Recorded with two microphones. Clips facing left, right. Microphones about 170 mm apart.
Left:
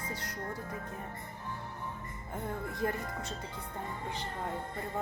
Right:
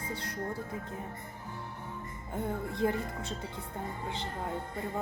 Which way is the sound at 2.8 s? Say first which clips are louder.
Right 4 dB; 20° right (ahead or behind).